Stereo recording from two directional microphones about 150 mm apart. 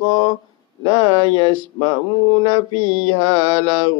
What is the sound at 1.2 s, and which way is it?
Mantra, 35° left (ahead or behind).